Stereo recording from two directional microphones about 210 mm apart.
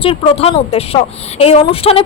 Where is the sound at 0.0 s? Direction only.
25° left (ahead or behind).